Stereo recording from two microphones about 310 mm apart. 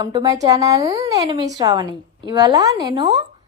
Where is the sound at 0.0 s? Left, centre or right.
Centre.